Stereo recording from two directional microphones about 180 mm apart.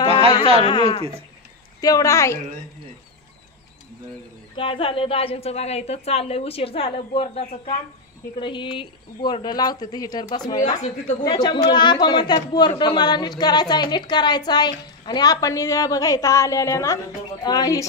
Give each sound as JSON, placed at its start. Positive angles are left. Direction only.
{"t": 0.7, "sound": "a woman's voice", "side_deg": 25}
{"t": 4.6, "sound": "a woman's voice", "side_deg": 30}
{"t": 10.8, "sound": "speech", "side_deg": 45}
{"t": 11.2, "sound": "speech", "side_deg": 25}